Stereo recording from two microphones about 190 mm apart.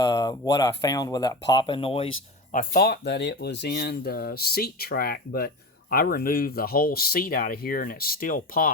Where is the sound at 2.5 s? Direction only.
50° left (ahead or behind).